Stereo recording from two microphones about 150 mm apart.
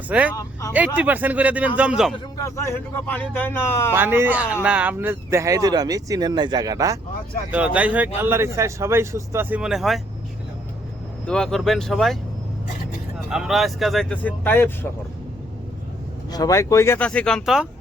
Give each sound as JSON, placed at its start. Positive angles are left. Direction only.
{"t": 0.1, "sound": "a man's voice", "side_deg": -10}
{"t": 2.4, "sound": "a man's voice", "side_deg": 15}
{"t": 3.9, "sound": "a man's voice", "side_deg": -15}
{"t": 7.5, "sound": "a man's voice", "side_deg": -10}
{"t": 11.3, "sound": "speech", "side_deg": 5}
{"t": 13.3, "sound": "speech", "side_deg": 0}
{"t": 16.3, "sound": "speech", "side_deg": 25}
{"t": 17.1, "sound": "speech", "side_deg": 5}